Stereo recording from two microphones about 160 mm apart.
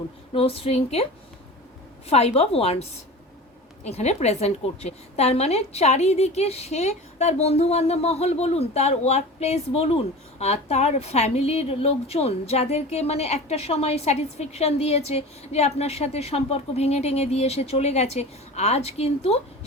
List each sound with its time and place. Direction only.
0.3 s a woman's voice: 35° left (ahead or behind)
2.0 s a woman's voice: 40° left (ahead or behind)
3.8 s a woman's voice: 40° left (ahead or behind)